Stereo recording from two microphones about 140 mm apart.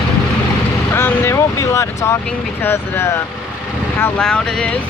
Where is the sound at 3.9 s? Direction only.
15° left (ahead or behind).